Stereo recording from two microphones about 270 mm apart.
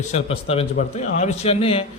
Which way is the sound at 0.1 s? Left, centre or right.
Left.